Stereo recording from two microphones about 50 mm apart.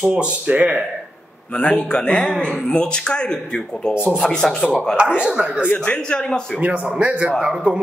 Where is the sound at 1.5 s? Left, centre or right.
Left.